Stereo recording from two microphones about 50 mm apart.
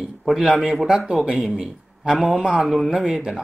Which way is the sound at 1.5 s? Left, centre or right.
Centre.